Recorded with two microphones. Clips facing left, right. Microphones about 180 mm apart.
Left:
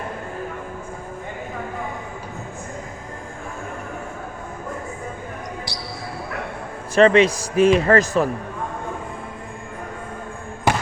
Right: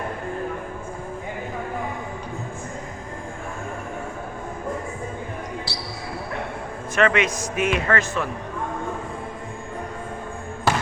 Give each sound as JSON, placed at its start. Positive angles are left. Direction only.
{"t": 5.7, "sound": "basketball bounce", "side_deg": 15}
{"t": 6.9, "sound": "a man's voice", "side_deg": 30}